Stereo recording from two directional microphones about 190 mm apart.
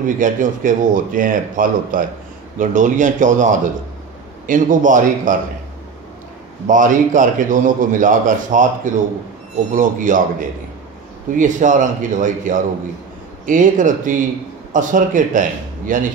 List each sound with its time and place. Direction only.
0.0 s a man's voice: 45° right (ahead or behind)
6.7 s a man's voice: 45° right (ahead or behind)
11.3 s a man's voice: 40° right (ahead or behind)